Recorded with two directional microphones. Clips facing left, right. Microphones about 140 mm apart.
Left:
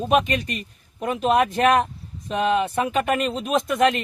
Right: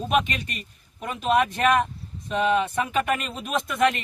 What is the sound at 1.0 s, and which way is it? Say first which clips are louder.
Speech: left 3 dB; 40° left (ahead or behind).